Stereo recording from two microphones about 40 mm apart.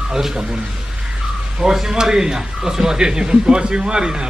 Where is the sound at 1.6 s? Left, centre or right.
Centre.